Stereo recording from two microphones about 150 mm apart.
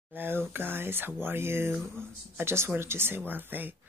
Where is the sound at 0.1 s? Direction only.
15° right (ahead or behind).